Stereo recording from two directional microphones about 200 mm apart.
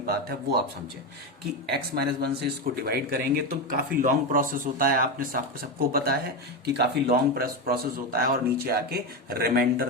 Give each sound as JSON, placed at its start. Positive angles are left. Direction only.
{"t": 0.0, "sound": "speech", "side_deg": -50}
{"t": 1.7, "sound": "speech", "side_deg": -55}